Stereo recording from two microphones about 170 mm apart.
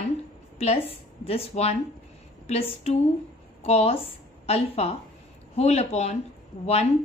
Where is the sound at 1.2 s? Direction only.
35° left (ahead or behind).